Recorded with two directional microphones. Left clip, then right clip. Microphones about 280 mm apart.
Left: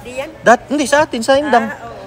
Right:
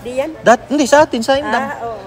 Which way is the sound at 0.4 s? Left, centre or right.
Centre.